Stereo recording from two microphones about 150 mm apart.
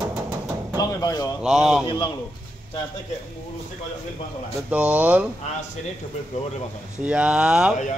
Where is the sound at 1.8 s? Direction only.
35° left (ahead or behind).